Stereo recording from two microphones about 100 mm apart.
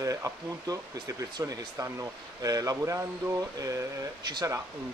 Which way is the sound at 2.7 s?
25° right (ahead or behind).